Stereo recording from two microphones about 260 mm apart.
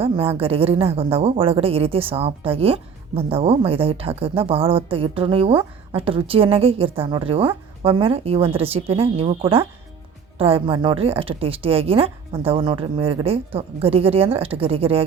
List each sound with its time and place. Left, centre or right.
0.0 s a woman's voice: right